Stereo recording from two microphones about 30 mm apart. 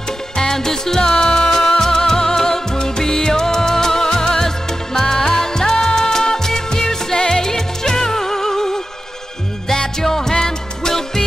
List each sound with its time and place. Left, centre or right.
0.4 s music: centre
10.0 s music: centre